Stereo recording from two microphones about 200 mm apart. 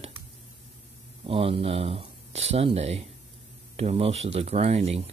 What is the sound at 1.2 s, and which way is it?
Speech, 30° right (ahead or behind).